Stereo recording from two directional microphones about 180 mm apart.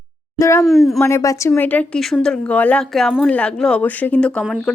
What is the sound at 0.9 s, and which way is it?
A woman's voice, 15° left (ahead or behind).